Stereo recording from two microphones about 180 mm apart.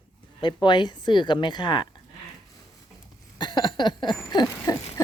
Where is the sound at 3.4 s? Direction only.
25° left (ahead or behind).